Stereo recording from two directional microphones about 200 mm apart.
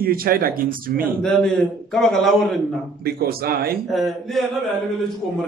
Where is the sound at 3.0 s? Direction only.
50° right (ahead or behind).